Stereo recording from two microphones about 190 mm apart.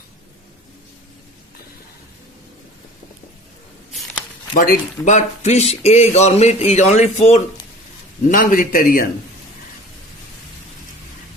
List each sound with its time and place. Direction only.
4.5 s a man's voice: 45° left (ahead or behind)